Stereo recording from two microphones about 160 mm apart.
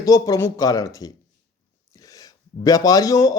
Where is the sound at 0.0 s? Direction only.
20° left (ahead or behind).